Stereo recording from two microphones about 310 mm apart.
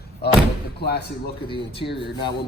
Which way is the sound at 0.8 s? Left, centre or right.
Left.